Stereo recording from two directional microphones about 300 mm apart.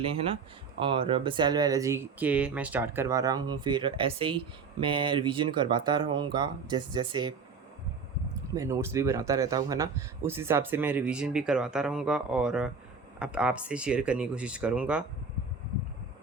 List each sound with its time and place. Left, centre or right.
0.8 s speech: centre
8.5 s speech: centre